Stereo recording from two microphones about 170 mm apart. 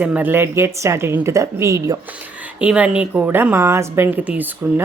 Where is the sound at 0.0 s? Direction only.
10° right (ahead or behind).